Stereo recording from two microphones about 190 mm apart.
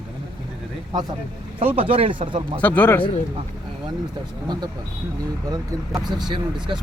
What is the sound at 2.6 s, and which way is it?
Speech, 10° left (ahead or behind).